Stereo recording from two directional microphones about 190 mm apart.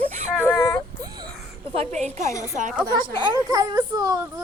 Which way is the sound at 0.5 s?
15° left (ahead or behind).